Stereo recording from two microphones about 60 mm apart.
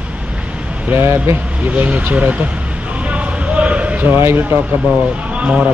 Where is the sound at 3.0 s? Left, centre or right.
Right.